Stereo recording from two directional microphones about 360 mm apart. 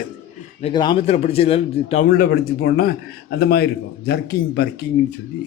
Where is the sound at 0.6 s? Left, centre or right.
Centre; by 4.7 s left.